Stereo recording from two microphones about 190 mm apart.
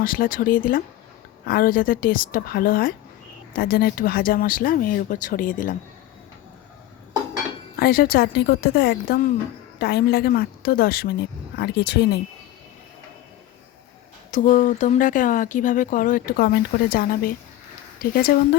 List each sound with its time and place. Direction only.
0.0 s speech: 50° left (ahead or behind)
7.8 s speech: 50° left (ahead or behind)
14.3 s speech: 40° left (ahead or behind)